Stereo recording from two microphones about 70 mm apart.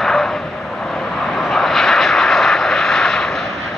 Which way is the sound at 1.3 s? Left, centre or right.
Centre.